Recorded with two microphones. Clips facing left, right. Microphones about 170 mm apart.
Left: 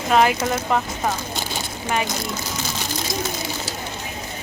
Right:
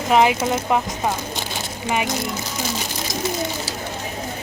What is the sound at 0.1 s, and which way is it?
Speech, 20° right (ahead or behind).